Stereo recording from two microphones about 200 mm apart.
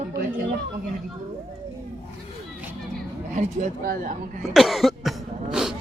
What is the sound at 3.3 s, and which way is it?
Speech, 40° right (ahead or behind).